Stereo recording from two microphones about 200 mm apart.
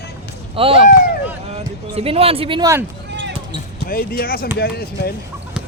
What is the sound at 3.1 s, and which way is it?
Basketball bounce, 60° right (ahead or behind).